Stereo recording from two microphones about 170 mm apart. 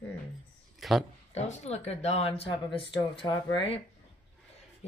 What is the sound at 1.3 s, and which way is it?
Speech, 40° left (ahead or behind).